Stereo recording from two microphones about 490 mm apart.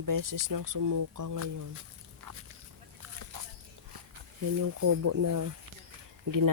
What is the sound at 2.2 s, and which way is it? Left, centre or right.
Dog, right.